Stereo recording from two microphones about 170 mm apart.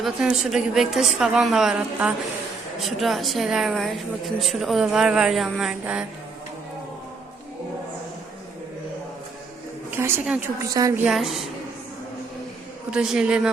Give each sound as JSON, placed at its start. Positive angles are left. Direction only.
{"t": 0.0, "sound": "a woman's voice", "side_deg": -5}
{"t": 9.9, "sound": "a woman's voice", "side_deg": -15}
{"t": 11.0, "sound": "a woman's voice", "side_deg": 0}
{"t": 12.9, "sound": "a woman's voice", "side_deg": -5}